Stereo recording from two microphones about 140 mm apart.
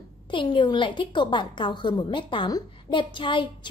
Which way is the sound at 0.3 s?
35° left (ahead or behind).